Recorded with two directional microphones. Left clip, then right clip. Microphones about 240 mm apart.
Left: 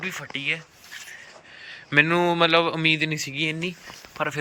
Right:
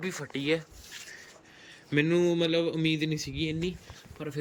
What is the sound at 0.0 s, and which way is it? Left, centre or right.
Speech, centre.